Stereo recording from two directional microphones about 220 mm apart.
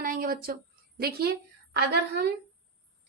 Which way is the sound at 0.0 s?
40° right (ahead or behind).